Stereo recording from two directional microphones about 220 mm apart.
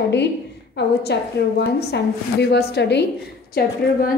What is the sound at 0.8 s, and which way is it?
A woman's voice, 50° left (ahead or behind).